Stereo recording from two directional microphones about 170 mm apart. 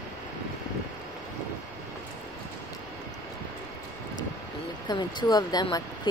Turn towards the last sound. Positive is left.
turn(degrees=25)  # may be behind; listen again after turning